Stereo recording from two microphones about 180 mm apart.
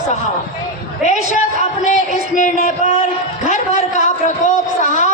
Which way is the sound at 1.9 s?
40° left (ahead or behind).